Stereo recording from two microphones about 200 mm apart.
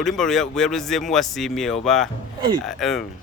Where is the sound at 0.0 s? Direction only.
Centre (ahead or behind).